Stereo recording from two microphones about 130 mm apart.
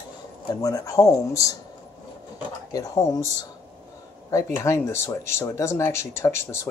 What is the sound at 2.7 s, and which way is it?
Speech, 25° left (ahead or behind).